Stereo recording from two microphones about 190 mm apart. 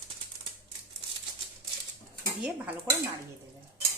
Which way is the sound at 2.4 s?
5° right (ahead or behind).